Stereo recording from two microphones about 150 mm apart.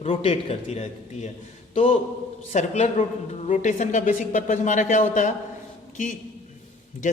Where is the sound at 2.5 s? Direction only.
50° left (ahead or behind).